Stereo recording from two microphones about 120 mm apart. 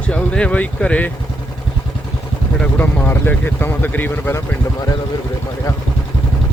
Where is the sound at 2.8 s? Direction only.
15° left (ahead or behind).